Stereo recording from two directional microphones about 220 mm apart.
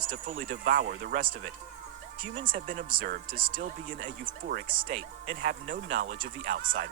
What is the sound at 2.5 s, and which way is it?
Speech, 40° right (ahead or behind).